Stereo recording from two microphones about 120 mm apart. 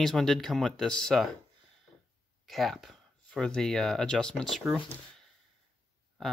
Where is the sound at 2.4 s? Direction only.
Centre (ahead or behind).